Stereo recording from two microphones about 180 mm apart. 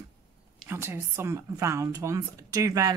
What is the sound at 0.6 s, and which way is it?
A woman's voice, 15° right (ahead or behind).